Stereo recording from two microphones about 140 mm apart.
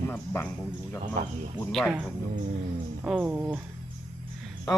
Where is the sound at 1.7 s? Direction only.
Centre (ahead or behind).